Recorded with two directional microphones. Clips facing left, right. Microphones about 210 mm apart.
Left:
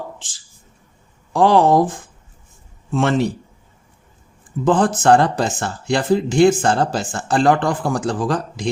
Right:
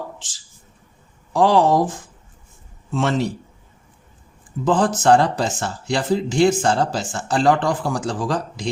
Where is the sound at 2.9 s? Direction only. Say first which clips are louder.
Left 3 dB; 55° left (ahead or behind).